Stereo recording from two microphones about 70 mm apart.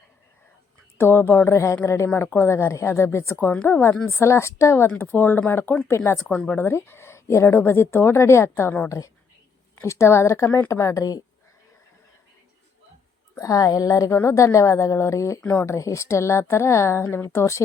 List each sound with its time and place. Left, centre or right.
0.9 s a woman's voice: left
4.9 s a woman's voice: left
9.8 s a woman's voice: left
13.4 s a woman's voice: left